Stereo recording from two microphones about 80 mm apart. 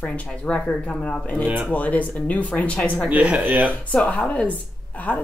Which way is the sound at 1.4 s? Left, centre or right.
Right.